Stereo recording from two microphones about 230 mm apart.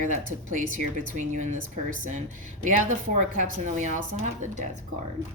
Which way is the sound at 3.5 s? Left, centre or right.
Right.